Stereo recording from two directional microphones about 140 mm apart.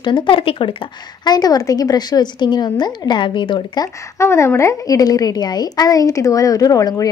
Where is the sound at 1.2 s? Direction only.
30° left (ahead or behind).